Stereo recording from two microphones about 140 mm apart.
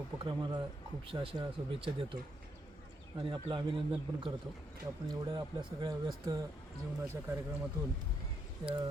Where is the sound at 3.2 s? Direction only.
35° right (ahead or behind).